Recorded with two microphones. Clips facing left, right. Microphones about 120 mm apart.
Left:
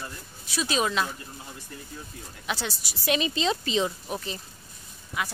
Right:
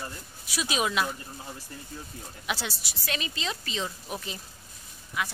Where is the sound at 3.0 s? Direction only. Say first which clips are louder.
Left 8 dB; 20° left (ahead or behind).